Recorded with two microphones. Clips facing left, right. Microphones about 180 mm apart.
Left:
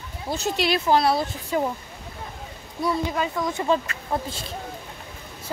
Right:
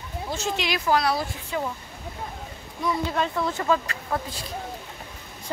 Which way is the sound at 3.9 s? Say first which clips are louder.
Right 1 dB; 35° right (ahead or behind).